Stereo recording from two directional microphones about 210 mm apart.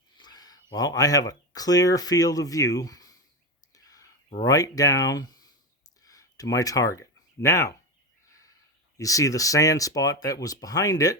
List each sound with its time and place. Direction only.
0.2 s speech: 20° left (ahead or behind)
3.8 s whispering: 15° left (ahead or behind)
4.4 s speech: 15° left (ahead or behind)
9.0 s speech: 15° left (ahead or behind)